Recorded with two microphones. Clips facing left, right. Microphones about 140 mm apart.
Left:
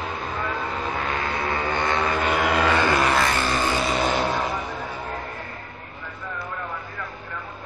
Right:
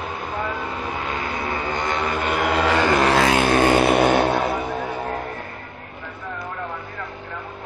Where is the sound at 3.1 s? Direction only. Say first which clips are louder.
Right 5 dB; 70° right (ahead or behind).